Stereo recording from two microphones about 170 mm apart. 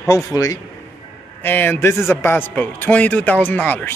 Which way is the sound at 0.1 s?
20° left (ahead or behind).